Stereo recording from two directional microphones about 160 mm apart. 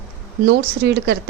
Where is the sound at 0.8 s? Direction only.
90° right.